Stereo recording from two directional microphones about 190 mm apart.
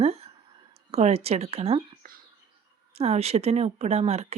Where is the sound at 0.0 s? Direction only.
35° right (ahead or behind).